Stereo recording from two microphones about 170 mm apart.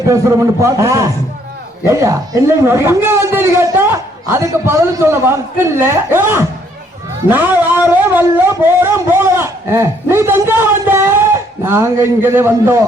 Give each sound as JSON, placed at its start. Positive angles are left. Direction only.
{"t": 0.1, "sound": "a man's voice", "side_deg": -20}